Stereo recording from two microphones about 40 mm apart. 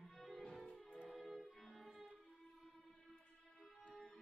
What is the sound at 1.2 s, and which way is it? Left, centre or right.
Music, centre.